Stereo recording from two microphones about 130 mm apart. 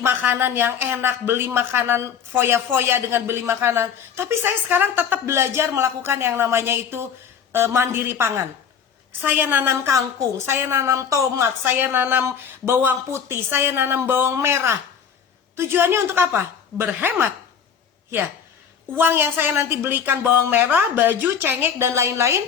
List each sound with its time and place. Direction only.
0.0 s a woman's voice: 15° right (ahead or behind)
18.9 s a woman's voice: 15° right (ahead or behind)